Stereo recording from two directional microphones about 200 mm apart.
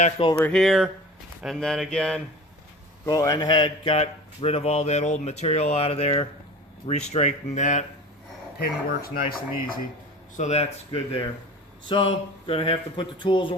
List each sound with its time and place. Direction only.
0.0 s speech: 25° left (ahead or behind)
0.4 s speech: centre (ahead or behind)
3.1 s speech: 20° left (ahead or behind); by 7.9 s 35° left (ahead or behind)
8.5 s speech: 50° left (ahead or behind)
10.3 s speech: 35° left (ahead or behind)